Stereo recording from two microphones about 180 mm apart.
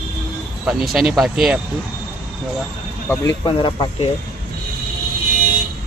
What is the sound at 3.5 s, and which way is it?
Speech, 30° left (ahead or behind).